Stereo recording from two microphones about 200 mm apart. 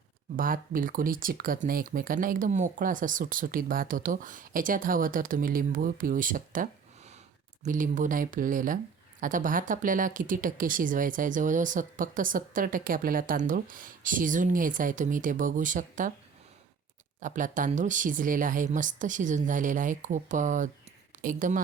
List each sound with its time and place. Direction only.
0.3 s speech: 45° right (ahead or behind)
17.2 s speech: 40° right (ahead or behind)